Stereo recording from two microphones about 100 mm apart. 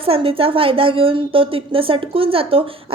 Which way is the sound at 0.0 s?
70° right (ahead or behind).